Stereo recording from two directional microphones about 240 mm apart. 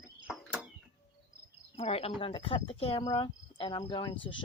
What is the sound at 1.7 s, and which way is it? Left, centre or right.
Speech, left.